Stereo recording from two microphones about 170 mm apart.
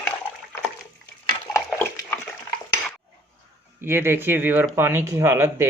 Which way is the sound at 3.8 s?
15° right (ahead or behind).